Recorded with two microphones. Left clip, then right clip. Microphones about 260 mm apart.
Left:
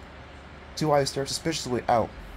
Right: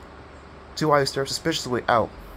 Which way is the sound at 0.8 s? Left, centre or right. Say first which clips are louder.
Right 3 dB; centre.